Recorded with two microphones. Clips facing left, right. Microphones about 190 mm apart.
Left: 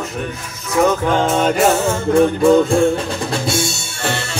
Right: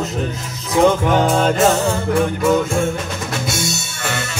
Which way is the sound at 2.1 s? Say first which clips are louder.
Left 6 dB; 30° left (ahead or behind).